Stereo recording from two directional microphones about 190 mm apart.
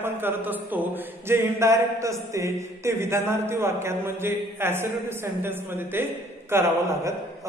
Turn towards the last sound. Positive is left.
turn(degrees=-15)  # may be behind; listen again after turning